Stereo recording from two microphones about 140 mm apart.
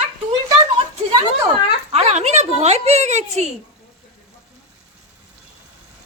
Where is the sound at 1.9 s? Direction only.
50° right (ahead or behind).